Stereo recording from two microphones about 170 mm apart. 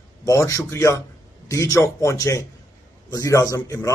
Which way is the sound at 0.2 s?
20° left (ahead or behind).